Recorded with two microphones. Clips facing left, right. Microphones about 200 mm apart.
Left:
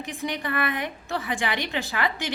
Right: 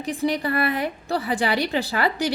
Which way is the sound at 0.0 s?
35° right (ahead or behind).